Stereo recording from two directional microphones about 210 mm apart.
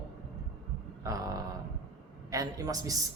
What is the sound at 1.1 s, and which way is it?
Speech, 15° right (ahead or behind).